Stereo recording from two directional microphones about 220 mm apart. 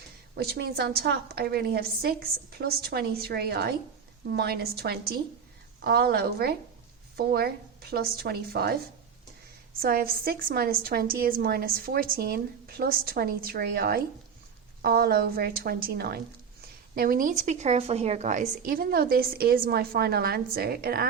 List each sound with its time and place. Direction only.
0.3 s a woman's voice: 45° right (ahead or behind)
9.8 s a woman's voice: 40° right (ahead or behind)